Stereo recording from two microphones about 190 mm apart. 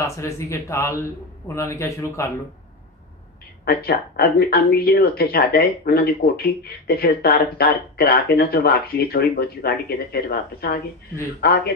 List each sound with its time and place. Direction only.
0.0 s speech: 15° left (ahead or behind)
3.6 s speech: 55° left (ahead or behind)